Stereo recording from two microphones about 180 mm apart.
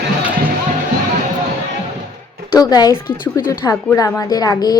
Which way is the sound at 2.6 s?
20° left (ahead or behind).